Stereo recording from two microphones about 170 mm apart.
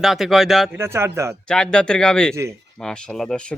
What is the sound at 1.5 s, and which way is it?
Speech, 5° left (ahead or behind).